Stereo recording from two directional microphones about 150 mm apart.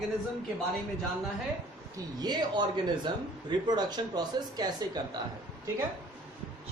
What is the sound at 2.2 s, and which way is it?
A woman's voice, 30° right (ahead or behind).